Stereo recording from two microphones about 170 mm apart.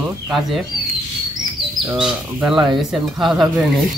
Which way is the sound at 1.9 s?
5° right (ahead or behind).